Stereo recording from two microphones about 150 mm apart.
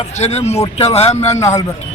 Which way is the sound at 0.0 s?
45° left (ahead or behind).